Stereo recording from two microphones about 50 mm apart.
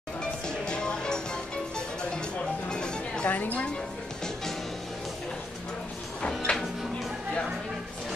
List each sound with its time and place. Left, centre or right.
0.2 s music: centre
3.3 s a woman's voice: left
6.5 s music: left